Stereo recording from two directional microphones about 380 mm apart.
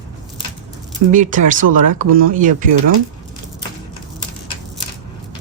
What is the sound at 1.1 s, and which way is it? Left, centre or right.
Speech, centre.